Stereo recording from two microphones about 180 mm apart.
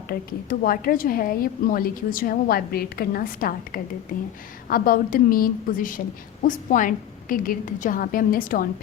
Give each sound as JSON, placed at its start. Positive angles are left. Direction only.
{"t": 0.1, "sound": "a woman's voice", "side_deg": 55}